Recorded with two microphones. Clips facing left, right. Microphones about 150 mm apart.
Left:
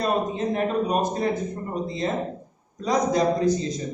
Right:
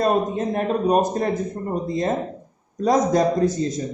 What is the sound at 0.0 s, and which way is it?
A man's voice, 45° right (ahead or behind).